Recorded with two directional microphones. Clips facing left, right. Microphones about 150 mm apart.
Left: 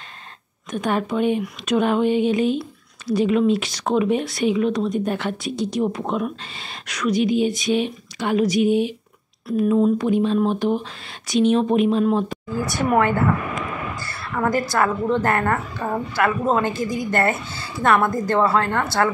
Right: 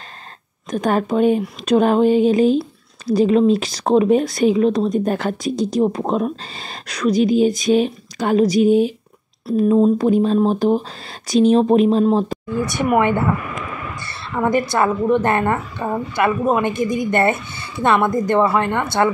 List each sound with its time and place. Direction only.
0.7 s speech: 40° right (ahead or behind)
12.4 s a woman's voice: 20° right (ahead or behind)